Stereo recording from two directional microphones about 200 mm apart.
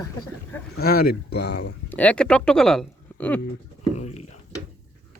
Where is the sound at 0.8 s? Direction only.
50° left (ahead or behind).